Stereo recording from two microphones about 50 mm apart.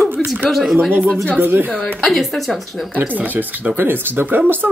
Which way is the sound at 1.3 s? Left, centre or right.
Right.